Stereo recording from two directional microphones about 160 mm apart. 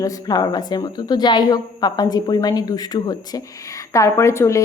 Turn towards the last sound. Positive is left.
turn(degrees=20)  # may be behind; listen again after turning